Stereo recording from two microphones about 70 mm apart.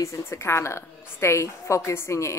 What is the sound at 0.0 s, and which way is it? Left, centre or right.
A woman's voice, left.